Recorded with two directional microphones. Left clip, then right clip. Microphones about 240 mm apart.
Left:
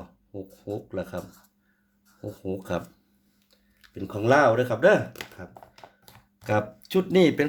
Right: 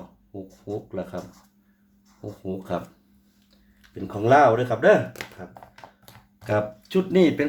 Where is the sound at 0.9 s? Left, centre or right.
Left.